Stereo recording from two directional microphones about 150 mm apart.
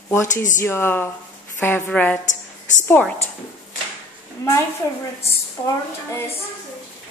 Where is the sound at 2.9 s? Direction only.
10° left (ahead or behind).